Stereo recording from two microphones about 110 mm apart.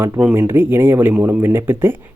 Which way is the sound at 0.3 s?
20° right (ahead or behind).